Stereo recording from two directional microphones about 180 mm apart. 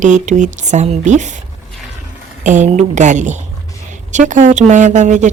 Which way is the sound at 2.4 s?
45° right (ahead or behind).